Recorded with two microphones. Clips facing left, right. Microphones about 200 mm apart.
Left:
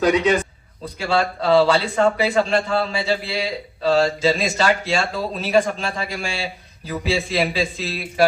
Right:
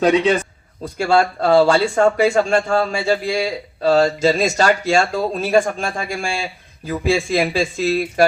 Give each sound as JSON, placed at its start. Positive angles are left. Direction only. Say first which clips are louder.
{"t": 0.0, "sound": "a man's voice", "louder": "right 2 dB", "side_deg": -25}
{"t": 0.9, "sound": "a man's voice", "louder": "right 5 dB", "side_deg": -45}